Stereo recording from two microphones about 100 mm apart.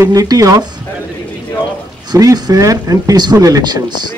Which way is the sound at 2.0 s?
40° right (ahead or behind).